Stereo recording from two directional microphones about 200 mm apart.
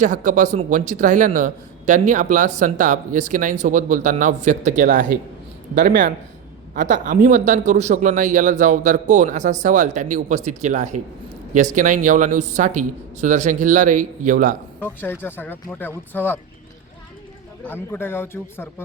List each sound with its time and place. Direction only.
0.0 s speech: 40° right (ahead or behind)
14.8 s speech: 10° left (ahead or behind)
17.7 s speech: 10° left (ahead or behind)